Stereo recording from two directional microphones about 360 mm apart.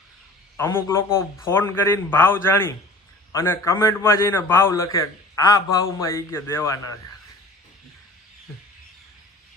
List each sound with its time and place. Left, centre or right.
0.5 s a man's voice: centre